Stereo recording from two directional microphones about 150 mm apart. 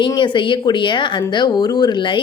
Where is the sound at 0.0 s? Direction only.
30° left (ahead or behind).